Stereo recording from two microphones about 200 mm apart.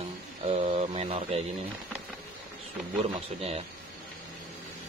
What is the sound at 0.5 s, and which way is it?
Mantra, 30° right (ahead or behind).